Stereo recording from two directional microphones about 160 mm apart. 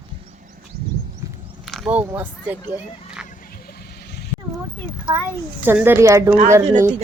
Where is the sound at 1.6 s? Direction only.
Centre (ahead or behind).